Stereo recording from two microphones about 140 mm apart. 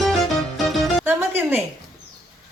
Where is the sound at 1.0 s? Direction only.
15° right (ahead or behind).